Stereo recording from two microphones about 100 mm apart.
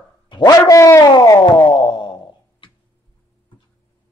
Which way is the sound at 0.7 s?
35° left (ahead or behind).